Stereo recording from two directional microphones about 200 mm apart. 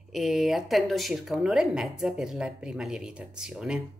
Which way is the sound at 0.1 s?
Centre (ahead or behind).